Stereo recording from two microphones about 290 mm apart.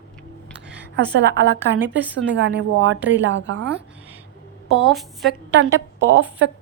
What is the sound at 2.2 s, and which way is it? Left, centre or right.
A woman's voice, right.